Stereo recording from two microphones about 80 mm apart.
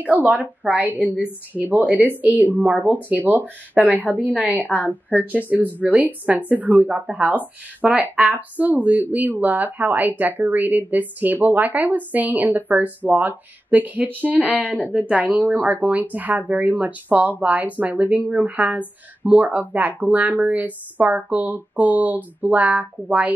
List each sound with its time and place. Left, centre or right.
0.0 s a woman's voice: centre
1.0 s a woman's voice: left
1.5 s a woman's voice: right
4.1 s a woman's voice: centre
5.5 s a woman's voice: right